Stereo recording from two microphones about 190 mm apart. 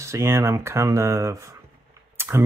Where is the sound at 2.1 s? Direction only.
15° right (ahead or behind).